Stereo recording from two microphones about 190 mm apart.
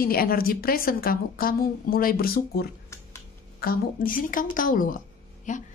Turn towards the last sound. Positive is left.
turn(degrees=45)  # may be behind; listen again after turning